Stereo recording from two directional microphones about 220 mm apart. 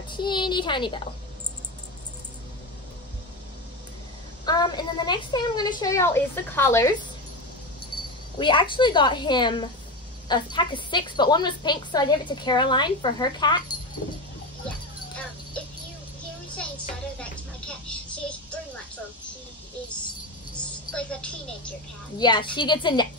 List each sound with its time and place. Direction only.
0.1 s a woman's voice: 20° left (ahead or behind)
4.5 s a woman's voice: 20° left (ahead or behind)
8.4 s a woman's voice: 20° left (ahead or behind)
17.2 s a sound: 5° left (ahead or behind)
20.5 s a sound: 5° left (ahead or behind)
22.2 s a woman's voice: 20° left (ahead or behind)